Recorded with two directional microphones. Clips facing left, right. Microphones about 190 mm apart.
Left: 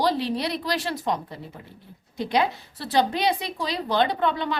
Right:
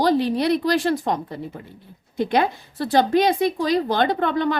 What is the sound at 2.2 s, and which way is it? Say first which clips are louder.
A woman's voice: right 3 dB; 50° right (ahead or behind).